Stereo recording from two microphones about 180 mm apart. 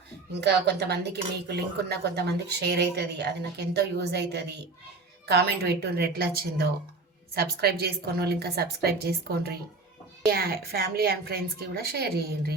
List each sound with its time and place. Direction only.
0.3 s a woman's voice: 70° right (ahead or behind)